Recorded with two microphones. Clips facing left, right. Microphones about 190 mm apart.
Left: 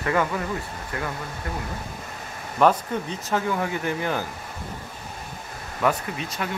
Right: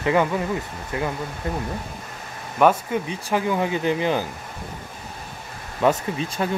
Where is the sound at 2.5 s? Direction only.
10° right (ahead or behind).